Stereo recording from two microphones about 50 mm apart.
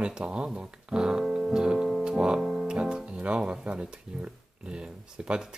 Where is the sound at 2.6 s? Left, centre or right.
Centre.